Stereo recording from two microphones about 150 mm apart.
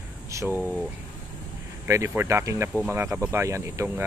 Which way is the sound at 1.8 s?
15° right (ahead or behind).